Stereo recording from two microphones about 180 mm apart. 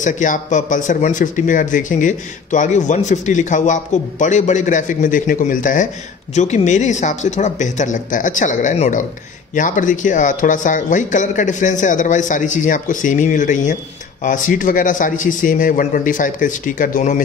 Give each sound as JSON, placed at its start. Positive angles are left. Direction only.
{"t": 0.0, "sound": "speech", "side_deg": 45}